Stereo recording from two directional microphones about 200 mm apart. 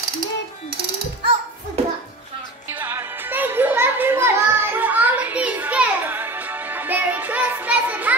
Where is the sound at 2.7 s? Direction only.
10° right (ahead or behind).